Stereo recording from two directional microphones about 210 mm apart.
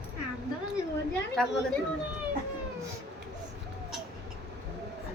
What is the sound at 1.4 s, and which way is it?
Speech, 5° left (ahead or behind).